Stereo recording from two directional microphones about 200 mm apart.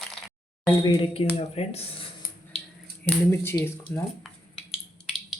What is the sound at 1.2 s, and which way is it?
Speech, 30° left (ahead or behind).